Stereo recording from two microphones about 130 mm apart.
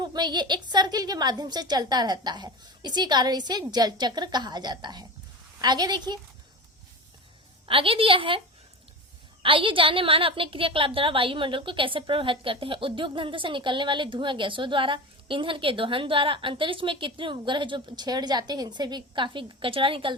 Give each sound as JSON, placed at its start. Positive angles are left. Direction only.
{"t": 0.0, "sound": "a woman's voice", "side_deg": -35}
{"t": 7.7, "sound": "a woman's voice", "side_deg": -45}
{"t": 9.4, "sound": "a woman's voice", "side_deg": -40}